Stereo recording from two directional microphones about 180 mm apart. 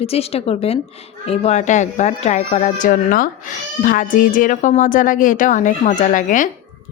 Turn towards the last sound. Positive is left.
turn(degrees=45)  # may be behind; listen again after turning